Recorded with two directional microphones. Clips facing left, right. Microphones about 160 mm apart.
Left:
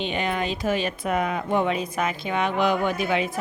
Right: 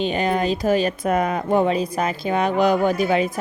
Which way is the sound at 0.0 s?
40° right (ahead or behind).